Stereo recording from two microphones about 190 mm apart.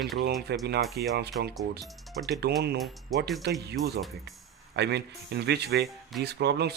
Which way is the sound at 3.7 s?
60° right (ahead or behind).